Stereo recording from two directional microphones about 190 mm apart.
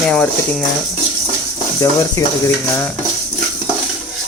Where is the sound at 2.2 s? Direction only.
20° left (ahead or behind).